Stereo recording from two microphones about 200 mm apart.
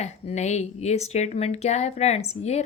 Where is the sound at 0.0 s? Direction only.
35° left (ahead or behind).